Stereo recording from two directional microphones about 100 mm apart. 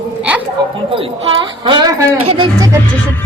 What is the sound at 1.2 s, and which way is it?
Speech, 55° right (ahead or behind).